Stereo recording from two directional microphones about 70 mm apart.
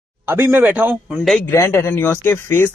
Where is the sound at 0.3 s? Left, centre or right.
Right.